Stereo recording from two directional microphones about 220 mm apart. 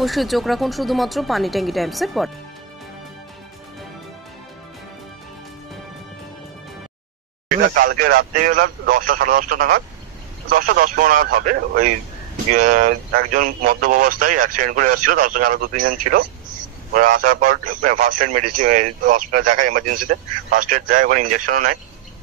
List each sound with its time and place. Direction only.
0.0 s speech: centre (ahead or behind)
7.7 s a man's voice: 40° right (ahead or behind)